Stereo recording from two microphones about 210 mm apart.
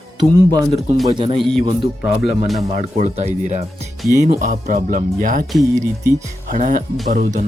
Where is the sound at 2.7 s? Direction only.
35° right (ahead or behind).